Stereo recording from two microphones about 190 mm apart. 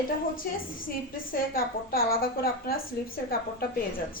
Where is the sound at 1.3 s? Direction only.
50° left (ahead or behind).